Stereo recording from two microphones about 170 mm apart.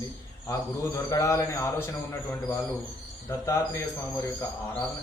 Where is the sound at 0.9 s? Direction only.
20° left (ahead or behind).